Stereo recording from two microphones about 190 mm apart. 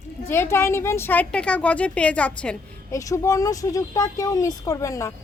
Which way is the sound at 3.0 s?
15° left (ahead or behind).